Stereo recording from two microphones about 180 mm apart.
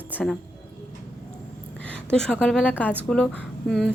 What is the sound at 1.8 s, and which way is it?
A woman's voice, 5° left (ahead or behind).